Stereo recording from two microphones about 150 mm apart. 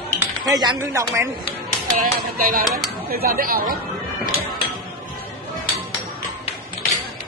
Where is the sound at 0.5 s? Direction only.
30° right (ahead or behind).